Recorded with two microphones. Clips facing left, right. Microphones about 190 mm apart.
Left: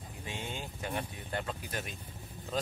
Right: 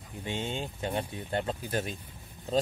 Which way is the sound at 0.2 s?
25° right (ahead or behind).